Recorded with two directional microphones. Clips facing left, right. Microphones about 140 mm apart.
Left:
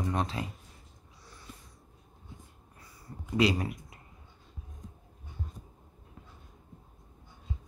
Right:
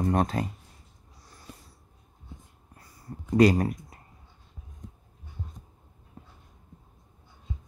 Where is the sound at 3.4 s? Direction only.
45° right (ahead or behind).